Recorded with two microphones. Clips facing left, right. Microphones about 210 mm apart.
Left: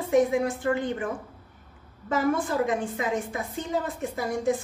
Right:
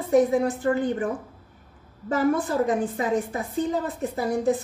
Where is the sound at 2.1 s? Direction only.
35° right (ahead or behind).